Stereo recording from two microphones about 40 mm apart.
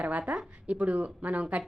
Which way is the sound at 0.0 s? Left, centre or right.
Right.